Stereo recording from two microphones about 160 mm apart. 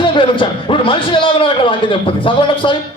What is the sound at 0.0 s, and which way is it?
A man's voice, 30° left (ahead or behind).